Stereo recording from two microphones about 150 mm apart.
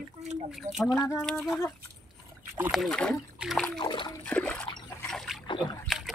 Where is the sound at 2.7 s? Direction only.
5° left (ahead or behind).